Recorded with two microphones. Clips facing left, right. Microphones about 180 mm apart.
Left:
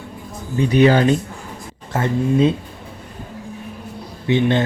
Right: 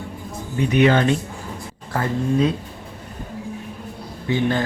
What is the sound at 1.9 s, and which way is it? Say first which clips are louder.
Speech: left 3 dB; 25° left (ahead or behind).